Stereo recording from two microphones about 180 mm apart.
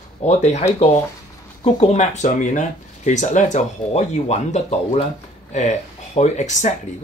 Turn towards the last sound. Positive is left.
turn(degrees=40)  # may be behind; listen again after turning